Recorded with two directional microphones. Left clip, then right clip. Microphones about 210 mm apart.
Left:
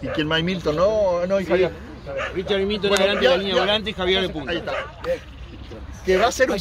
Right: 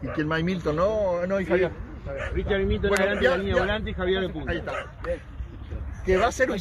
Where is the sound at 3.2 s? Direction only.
10° right (ahead or behind).